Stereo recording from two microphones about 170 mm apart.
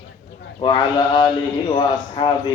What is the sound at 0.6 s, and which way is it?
A man's voice, 25° left (ahead or behind).